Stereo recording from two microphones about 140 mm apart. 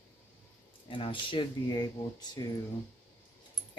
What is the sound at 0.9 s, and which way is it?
Speech, 35° left (ahead or behind).